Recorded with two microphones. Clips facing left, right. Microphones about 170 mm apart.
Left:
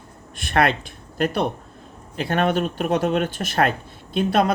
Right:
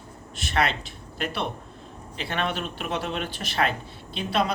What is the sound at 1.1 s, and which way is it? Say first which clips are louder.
Speech: left 8 dB; 45° left (ahead or behind).